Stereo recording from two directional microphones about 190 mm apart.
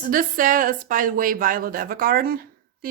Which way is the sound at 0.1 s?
45° right (ahead or behind).